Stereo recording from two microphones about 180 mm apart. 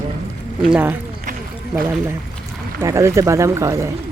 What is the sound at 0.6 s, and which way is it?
Speech, 5° right (ahead or behind).